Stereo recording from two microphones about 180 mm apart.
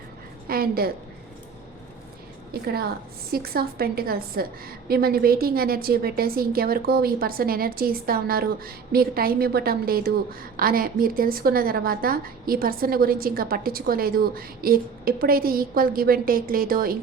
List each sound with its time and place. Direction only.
0.4 s a woman's voice: 55° right (ahead or behind)
2.5 s a woman's voice: 60° right (ahead or behind)